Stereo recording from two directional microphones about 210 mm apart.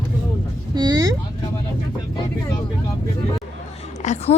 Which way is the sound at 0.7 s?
20° right (ahead or behind).